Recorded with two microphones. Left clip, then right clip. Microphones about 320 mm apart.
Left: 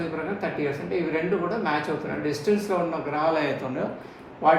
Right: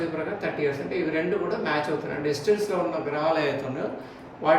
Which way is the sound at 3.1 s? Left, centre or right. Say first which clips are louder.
Left 1 dB; centre.